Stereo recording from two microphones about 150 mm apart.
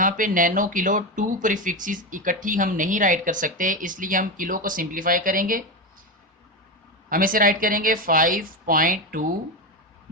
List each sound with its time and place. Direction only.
0.0 s speech: 65° right (ahead or behind)
7.1 s speech: 70° right (ahead or behind)